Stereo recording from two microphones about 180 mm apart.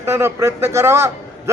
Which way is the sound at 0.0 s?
15° right (ahead or behind).